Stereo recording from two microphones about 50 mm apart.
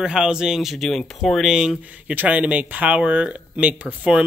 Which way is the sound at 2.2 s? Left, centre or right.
Right.